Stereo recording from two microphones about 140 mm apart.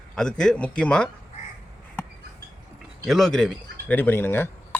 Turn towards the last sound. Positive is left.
turn(degrees=15)  # may be behind; listen again after turning